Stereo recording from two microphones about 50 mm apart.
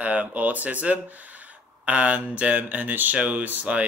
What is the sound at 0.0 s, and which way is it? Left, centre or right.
Speech, right.